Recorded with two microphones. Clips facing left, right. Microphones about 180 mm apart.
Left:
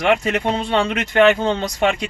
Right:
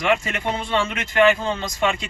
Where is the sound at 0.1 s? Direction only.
70° left (ahead or behind).